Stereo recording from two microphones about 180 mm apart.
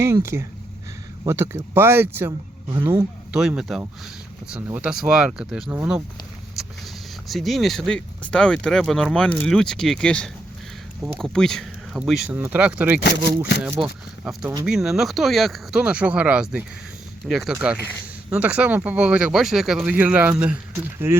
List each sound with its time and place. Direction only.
0.0 s speech: 15° right (ahead or behind)
13.0 s speech: 65° left (ahead or behind)
13.6 s speech: 10° right (ahead or behind)